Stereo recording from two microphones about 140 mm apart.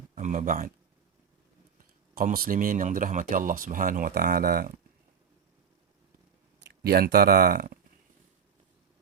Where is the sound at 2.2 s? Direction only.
90° right.